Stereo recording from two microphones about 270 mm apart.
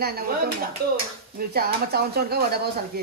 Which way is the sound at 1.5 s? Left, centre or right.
Right.